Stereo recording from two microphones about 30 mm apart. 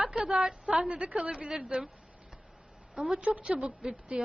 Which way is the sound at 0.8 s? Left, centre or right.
Right.